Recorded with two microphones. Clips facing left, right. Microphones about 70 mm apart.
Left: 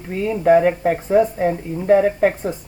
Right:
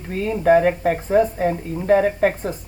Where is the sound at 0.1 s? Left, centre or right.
Centre.